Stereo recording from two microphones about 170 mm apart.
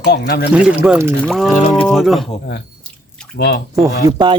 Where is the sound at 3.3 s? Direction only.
70° left (ahead or behind).